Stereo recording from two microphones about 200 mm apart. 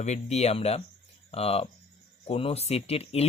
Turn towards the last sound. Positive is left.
turn(degrees=30)  # may be behind; listen again after turning